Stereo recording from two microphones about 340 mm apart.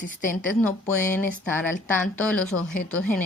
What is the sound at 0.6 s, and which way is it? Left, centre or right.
A woman's voice, centre.